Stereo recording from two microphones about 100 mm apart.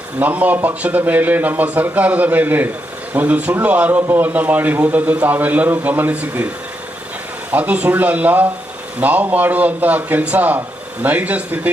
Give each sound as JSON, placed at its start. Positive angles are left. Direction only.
{"t": 0.2, "sound": "a man's voice", "side_deg": -15}
{"t": 7.5, "sound": "a man's voice", "side_deg": -15}